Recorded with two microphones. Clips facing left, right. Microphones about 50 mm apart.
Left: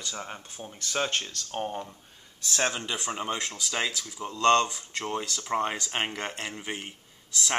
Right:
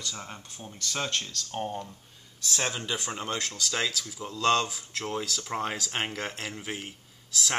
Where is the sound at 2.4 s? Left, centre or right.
Centre.